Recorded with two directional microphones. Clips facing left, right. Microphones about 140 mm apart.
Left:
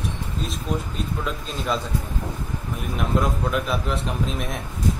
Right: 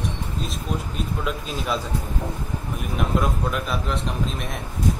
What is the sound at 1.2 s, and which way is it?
Speech, 5° right (ahead or behind).